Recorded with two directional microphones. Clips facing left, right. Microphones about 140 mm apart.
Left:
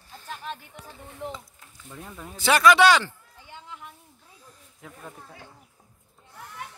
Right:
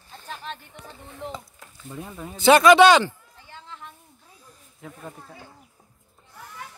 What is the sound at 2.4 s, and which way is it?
Speech, 25° right (ahead or behind).